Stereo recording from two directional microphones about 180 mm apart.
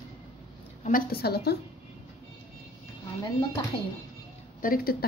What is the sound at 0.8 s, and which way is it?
Speech, 50° left (ahead or behind).